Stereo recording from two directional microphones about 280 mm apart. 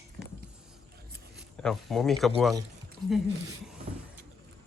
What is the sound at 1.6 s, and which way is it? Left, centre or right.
Speech, centre.